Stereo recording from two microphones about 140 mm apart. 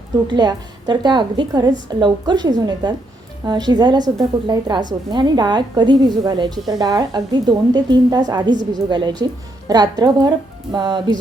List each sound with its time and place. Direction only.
0.3 s a woman's voice: 30° right (ahead or behind)